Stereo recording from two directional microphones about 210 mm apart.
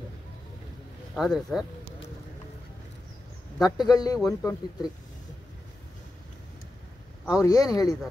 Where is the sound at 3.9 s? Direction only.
20° left (ahead or behind).